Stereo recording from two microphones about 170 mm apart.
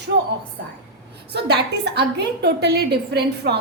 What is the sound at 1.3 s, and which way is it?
A woman's voice, 75° right (ahead or behind).